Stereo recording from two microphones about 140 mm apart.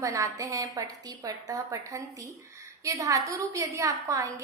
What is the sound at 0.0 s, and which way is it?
A woman's voice, 25° right (ahead or behind).